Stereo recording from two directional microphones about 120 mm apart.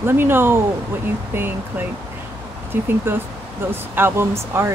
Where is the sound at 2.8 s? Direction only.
20° right (ahead or behind).